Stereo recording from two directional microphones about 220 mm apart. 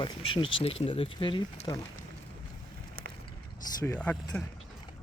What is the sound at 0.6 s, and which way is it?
Speech, 25° left (ahead or behind).